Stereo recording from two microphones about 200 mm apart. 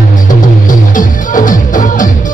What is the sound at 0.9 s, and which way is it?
Music, 40° left (ahead or behind).